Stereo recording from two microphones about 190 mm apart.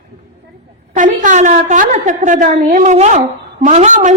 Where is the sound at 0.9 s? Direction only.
40° right (ahead or behind).